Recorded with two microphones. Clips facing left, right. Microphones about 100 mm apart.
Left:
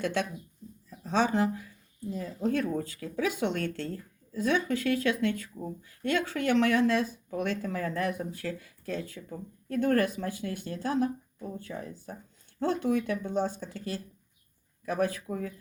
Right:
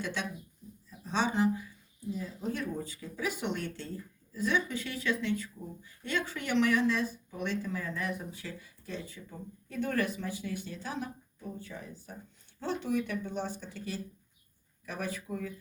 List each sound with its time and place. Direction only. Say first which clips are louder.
0.0 s a woman's voice: left 6 dB; 55° left (ahead or behind)